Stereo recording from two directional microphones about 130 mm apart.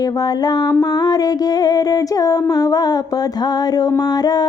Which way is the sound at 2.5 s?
30° left (ahead or behind).